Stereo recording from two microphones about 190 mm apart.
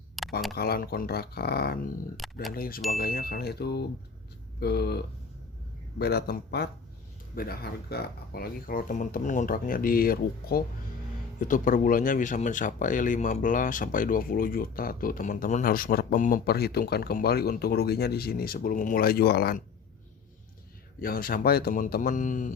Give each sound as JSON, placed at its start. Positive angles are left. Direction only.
{"t": 0.2, "sound": "a sound", "side_deg": 0}
{"t": 0.5, "sound": "speech", "side_deg": 55}
{"t": 2.1, "sound": "speech", "side_deg": 0}
{"t": 2.5, "sound": "speech", "side_deg": 50}
{"t": 21.0, "sound": "speech", "side_deg": 50}